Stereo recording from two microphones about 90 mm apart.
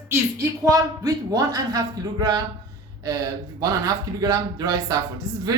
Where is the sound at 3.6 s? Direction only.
40° right (ahead or behind).